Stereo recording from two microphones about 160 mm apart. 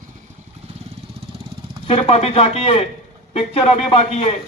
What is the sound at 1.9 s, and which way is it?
A man's voice, 40° left (ahead or behind).